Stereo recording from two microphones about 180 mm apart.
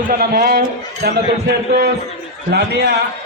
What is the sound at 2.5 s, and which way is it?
Speech, 65° right (ahead or behind).